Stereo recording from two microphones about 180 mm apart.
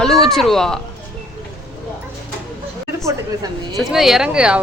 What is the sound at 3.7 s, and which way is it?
Speech, centre (ahead or behind).